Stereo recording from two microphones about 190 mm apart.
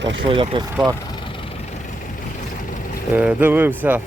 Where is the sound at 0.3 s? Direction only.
25° right (ahead or behind).